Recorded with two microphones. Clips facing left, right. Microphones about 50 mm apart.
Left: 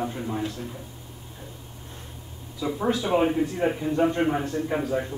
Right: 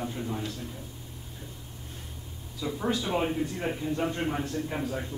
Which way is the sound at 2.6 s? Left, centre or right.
Centre.